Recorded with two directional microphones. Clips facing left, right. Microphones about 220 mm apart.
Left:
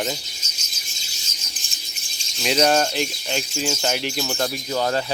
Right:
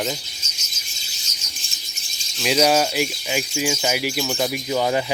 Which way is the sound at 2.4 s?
5° right (ahead or behind).